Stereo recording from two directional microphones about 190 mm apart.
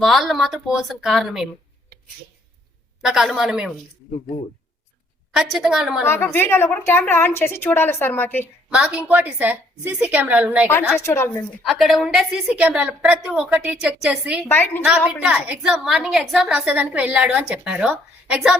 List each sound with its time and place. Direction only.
0.0 s a woman's voice: centre (ahead or behind)
3.0 s a woman's voice: centre (ahead or behind)
5.3 s a woman's voice: centre (ahead or behind)
6.1 s a woman's voice: 10° left (ahead or behind)
8.7 s a woman's voice: 5° right (ahead or behind)
11.0 s a woman's voice: 15° left (ahead or behind)
11.6 s a woman's voice: centre (ahead or behind)
14.4 s a woman's voice: 10° left (ahead or behind)
14.8 s a woman's voice: 5° right (ahead or behind)